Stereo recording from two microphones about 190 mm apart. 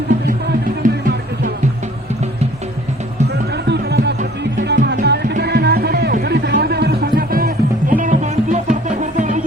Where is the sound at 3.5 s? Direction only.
60° right (ahead or behind); by 9.4 s 40° right (ahead or behind).